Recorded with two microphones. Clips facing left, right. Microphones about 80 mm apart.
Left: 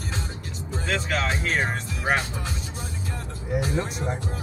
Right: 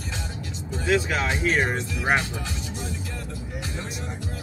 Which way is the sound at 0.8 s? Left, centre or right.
Centre.